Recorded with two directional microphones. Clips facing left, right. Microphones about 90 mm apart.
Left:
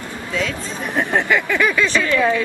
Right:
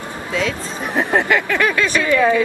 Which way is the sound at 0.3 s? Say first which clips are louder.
Right 2 dB; centre (ahead or behind).